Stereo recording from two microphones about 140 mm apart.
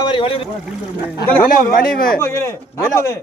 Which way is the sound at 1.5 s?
90° left.